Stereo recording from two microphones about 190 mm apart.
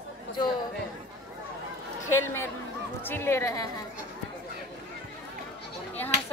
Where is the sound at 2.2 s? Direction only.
10° left (ahead or behind).